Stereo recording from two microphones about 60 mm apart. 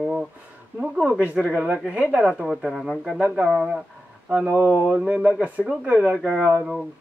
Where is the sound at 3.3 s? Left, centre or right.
Centre.